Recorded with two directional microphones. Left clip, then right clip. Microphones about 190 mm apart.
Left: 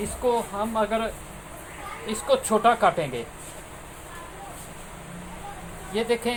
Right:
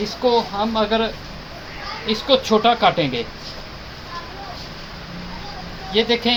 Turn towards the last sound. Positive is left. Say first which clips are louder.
# right 7 dB
turn(degrees=25)  # may be behind; listen again after turning